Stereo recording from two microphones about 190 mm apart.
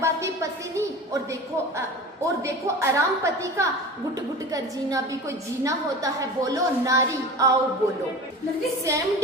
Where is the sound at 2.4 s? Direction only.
15° right (ahead or behind).